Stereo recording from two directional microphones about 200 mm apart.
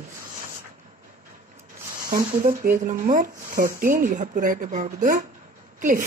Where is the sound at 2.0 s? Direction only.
45° right (ahead or behind).